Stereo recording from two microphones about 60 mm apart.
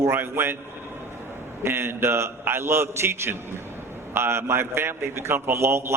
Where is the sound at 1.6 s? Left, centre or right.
Right.